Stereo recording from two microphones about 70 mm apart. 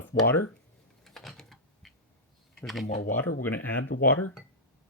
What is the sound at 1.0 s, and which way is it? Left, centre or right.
Typing, centre.